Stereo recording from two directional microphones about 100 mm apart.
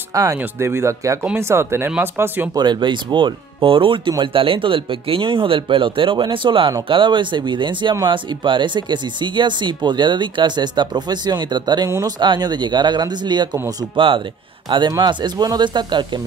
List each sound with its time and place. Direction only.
0.1 s speech: 30° right (ahead or behind)
2.5 s speech: 45° right (ahead or behind)
13.9 s speech: 60° right (ahead or behind)
14.7 s speech: 50° right (ahead or behind)